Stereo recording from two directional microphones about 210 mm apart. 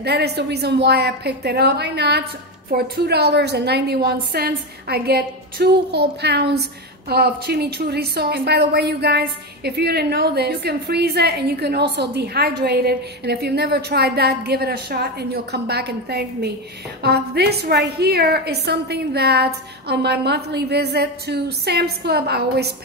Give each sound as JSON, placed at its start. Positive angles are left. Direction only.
{"t": 0.0, "sound": "a woman's voice", "side_deg": -50}